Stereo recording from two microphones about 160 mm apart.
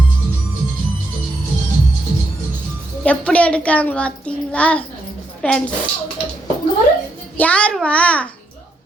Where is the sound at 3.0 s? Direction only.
10° left (ahead or behind).